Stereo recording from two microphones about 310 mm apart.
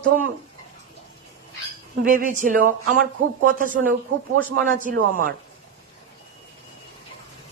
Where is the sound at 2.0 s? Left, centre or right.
Right.